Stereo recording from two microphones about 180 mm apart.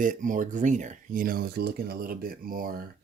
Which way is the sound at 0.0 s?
45° right (ahead or behind).